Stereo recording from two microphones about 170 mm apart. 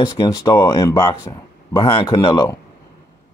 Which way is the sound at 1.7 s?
30° left (ahead or behind).